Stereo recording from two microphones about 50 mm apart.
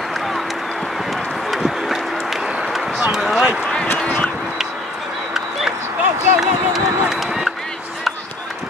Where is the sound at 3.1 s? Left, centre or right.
Centre.